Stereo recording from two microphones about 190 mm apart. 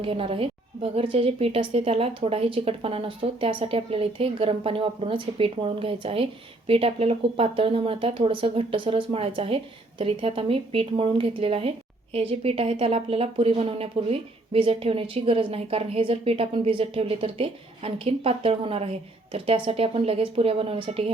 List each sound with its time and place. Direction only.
0.0 s a woman's voice: 30° right (ahead or behind)